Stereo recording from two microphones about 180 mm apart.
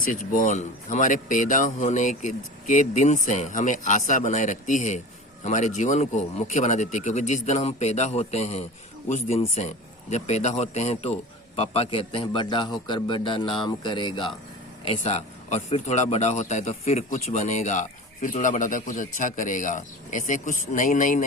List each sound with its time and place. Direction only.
0.0 s a man's voice: 50° left (ahead or behind); by 14.3 s 25° left (ahead or behind)
14.8 s a man's voice: 35° left (ahead or behind)